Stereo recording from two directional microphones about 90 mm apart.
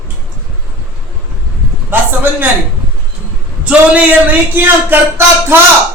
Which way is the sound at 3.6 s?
15° right (ahead or behind).